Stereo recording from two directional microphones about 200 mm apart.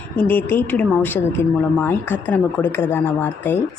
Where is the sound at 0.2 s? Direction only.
10° left (ahead or behind).